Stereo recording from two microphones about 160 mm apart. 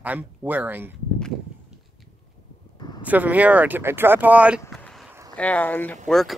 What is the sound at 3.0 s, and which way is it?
Speech, 10° right (ahead or behind).